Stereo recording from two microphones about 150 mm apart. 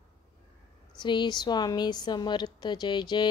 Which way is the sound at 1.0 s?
30° left (ahead or behind).